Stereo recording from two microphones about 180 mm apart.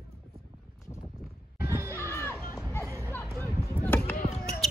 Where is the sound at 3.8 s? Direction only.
10° left (ahead or behind).